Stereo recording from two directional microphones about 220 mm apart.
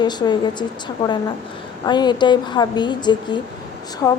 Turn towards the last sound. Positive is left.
turn(degrees=15)  # may be behind; listen again after turning